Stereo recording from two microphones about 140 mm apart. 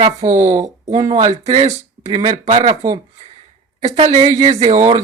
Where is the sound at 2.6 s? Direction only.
50° right (ahead or behind).